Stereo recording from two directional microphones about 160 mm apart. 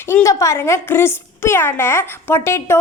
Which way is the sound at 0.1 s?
20° left (ahead or behind).